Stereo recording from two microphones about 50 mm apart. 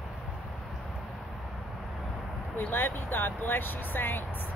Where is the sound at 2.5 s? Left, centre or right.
Left.